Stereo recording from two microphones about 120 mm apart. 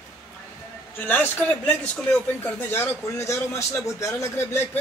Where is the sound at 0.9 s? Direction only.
15° left (ahead or behind).